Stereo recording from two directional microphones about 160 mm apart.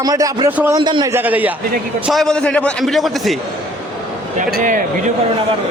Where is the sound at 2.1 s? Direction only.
5° left (ahead or behind).